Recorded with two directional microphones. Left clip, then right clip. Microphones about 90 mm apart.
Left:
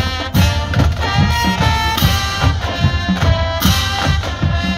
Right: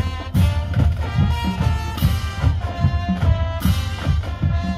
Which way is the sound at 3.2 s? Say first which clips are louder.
Left 10 dB; 5° left (ahead or behind).